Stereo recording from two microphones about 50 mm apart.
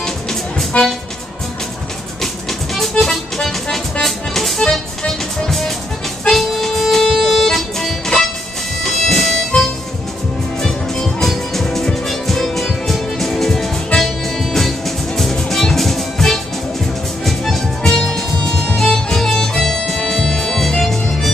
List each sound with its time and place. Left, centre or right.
0.0 s music: centre
2.9 s music: centre
10.6 s music: centre